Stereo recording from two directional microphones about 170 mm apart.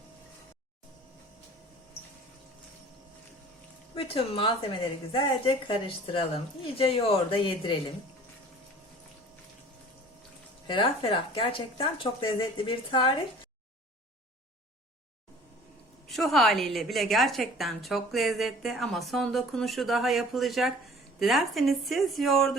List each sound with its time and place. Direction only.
3.9 s a woman's voice: 35° left (ahead or behind)
10.7 s a woman's voice: 30° left (ahead or behind)
16.0 s a woman's voice: centre (ahead or behind)